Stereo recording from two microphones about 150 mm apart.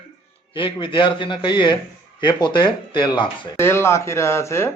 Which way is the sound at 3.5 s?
15° left (ahead or behind).